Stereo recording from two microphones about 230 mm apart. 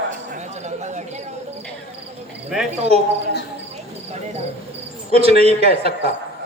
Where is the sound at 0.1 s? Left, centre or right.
Right.